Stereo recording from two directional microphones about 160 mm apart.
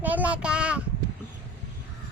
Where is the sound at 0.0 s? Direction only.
10° right (ahead or behind).